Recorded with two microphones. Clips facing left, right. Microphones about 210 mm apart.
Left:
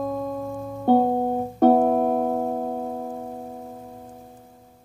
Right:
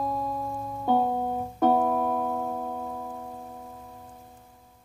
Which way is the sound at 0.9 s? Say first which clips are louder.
Left 6 dB; 40° left (ahead or behind).